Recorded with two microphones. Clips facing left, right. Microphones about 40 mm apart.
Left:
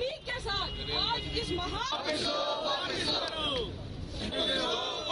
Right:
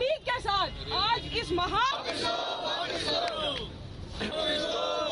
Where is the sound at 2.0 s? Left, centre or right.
Right.